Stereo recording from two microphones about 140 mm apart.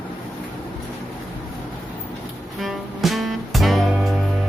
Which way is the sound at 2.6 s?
Centre (ahead or behind).